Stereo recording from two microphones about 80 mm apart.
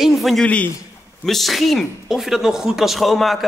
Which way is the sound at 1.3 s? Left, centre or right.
Centre.